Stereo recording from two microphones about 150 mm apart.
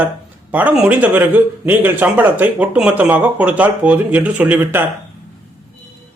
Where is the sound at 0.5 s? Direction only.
10° right (ahead or behind).